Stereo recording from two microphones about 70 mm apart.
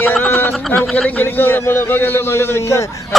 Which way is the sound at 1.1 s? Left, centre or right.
Left.